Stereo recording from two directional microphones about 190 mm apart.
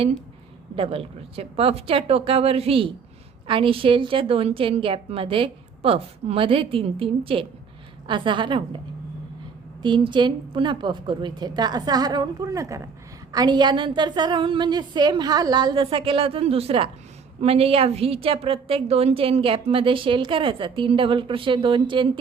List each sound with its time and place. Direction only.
0.8 s a woman's voice: 30° right (ahead or behind)
9.8 s a woman's voice: 25° right (ahead or behind)